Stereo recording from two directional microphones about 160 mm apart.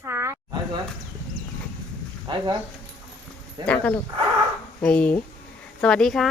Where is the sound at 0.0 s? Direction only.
15° right (ahead or behind).